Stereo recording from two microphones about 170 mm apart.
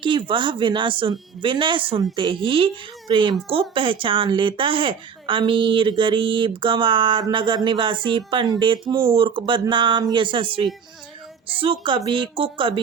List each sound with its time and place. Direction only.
0.0 s a woman's voice: 30° right (ahead or behind)